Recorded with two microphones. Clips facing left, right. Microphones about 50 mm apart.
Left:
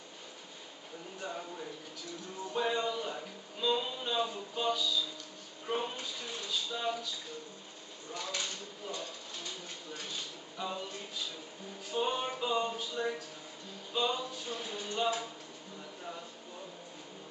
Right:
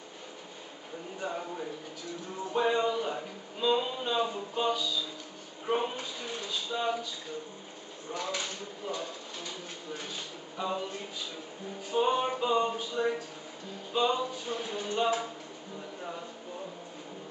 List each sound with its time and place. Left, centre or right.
1.2 s speech: centre
8.1 s speech: centre
16.0 s a sound: centre